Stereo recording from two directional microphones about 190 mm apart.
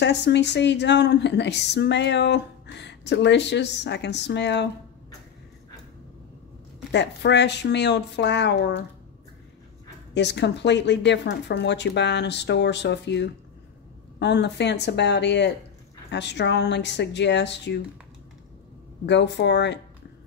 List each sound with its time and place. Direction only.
0.0 s speech: 65° left (ahead or behind)
6.9 s speech: 65° left (ahead or behind)
10.1 s speech: 65° left (ahead or behind)
19.0 s speech: 65° left (ahead or behind)